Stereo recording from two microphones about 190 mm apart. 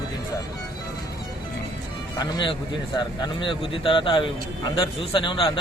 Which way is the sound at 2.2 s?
25° left (ahead or behind).